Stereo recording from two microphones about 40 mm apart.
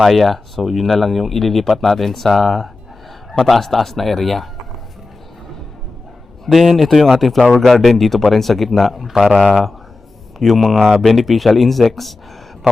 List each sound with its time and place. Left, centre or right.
0.0 s speech: centre
6.5 s a man's voice: centre
9.4 s speech: right
10.4 s speech: centre